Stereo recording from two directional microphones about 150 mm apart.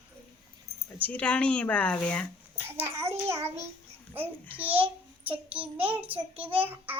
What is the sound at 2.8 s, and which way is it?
Child singing, 15° right (ahead or behind).